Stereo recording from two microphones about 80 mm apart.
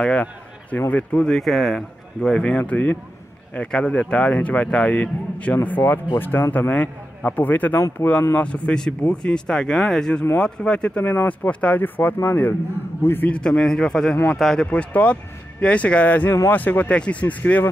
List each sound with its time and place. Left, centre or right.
0.0 s a man's voice: centre
1.2 s speech: centre; by 13.3 s left
13.3 s speech: centre
14.7 s speech: centre